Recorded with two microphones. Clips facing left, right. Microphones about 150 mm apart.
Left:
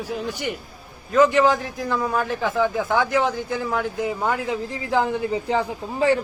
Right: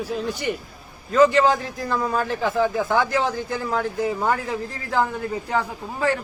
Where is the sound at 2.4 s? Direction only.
15° right (ahead or behind).